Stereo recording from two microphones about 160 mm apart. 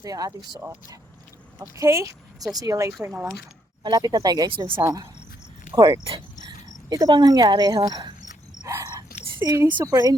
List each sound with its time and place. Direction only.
0.0 s a woman's voice: 25° right (ahead or behind)
1.5 s a woman's voice: 20° right (ahead or behind)
3.8 s a woman's voice: 25° right (ahead or behind)
4.8 s a woman's voice: 20° right (ahead or behind)
6.9 s a woman's voice: 25° right (ahead or behind)
8.6 s a sound: 20° right (ahead or behind)
9.4 s a woman's voice: 15° right (ahead or behind)